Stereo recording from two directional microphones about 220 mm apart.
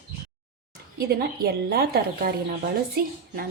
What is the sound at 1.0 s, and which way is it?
A woman's voice, 45° right (ahead or behind).